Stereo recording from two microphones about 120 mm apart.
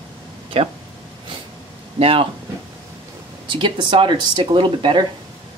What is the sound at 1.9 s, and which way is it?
Speech, 50° right (ahead or behind).